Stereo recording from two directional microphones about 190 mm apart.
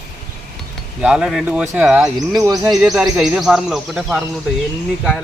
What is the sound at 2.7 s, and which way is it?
Speech, 5° right (ahead or behind).